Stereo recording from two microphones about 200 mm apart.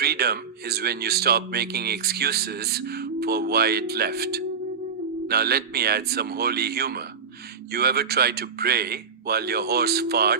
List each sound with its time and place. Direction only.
0.0 s speech: 50° right (ahead or behind)